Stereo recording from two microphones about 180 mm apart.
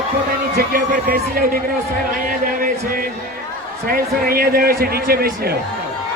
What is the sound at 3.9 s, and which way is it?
A man's voice, 55° right (ahead or behind).